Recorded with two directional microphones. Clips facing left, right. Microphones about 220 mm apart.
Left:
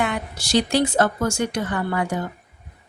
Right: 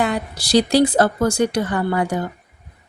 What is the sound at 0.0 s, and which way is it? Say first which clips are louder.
Speech: right 4 dB; 35° right (ahead or behind).